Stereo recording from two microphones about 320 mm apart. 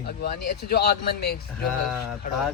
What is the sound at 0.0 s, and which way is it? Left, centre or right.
A man's voice, left.